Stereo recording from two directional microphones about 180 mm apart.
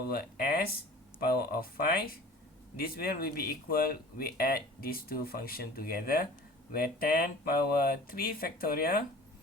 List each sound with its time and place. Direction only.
0.1 s speech: 55° left (ahead or behind)